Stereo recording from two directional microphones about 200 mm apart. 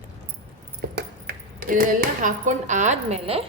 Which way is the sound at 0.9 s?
50° right (ahead or behind).